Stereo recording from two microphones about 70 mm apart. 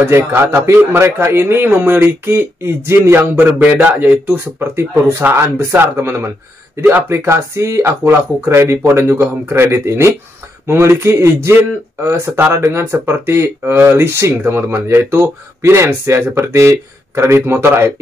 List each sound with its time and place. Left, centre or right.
0.1 s speech: right
12.5 s speech: right